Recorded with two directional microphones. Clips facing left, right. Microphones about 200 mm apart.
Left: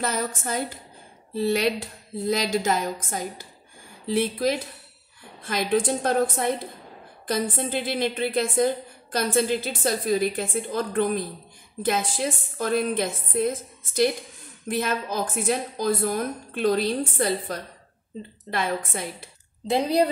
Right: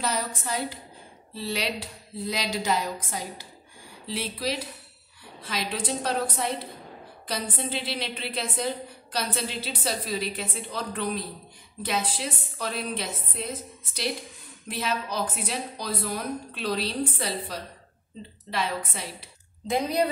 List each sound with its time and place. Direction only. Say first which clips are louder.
0.0 s a woman's voice: left 3 dB; 50° left (ahead or behind)
19.7 s a woman's voice: left 4 dB; 30° left (ahead or behind)